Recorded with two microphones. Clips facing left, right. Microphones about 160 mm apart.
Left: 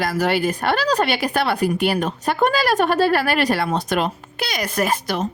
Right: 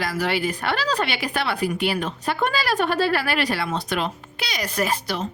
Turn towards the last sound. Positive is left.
turn(degrees=50)  # may be behind; listen again after turning